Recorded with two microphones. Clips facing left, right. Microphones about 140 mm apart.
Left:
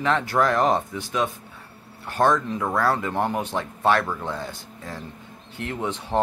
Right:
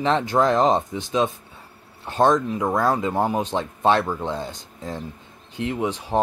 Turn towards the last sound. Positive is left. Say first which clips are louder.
# right 2 dB
turn(degrees=-15)  # may be behind; listen again after turning